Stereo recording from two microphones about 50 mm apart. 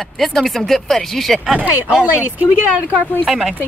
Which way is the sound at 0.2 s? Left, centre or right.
Centre.